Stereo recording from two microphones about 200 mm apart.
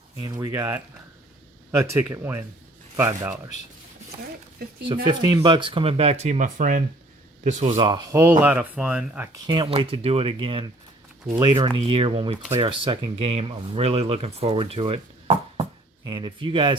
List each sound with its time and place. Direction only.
0.2 s speech: 20° right (ahead or behind)
5.0 s speech: 20° right (ahead or behind); by 6.8 s 40° right (ahead or behind)
7.4 s speech: 30° right (ahead or behind); by 9.4 s 10° right (ahead or behind)
9.5 s speech: 25° right (ahead or behind)